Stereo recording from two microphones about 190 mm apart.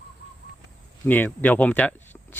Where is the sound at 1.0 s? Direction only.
10° left (ahead or behind).